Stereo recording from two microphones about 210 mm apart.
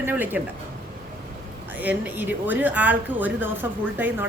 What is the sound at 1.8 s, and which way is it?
A woman's voice, 10° right (ahead or behind).